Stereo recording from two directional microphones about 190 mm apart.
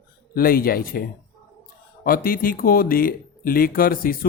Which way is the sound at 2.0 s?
50° left (ahead or behind).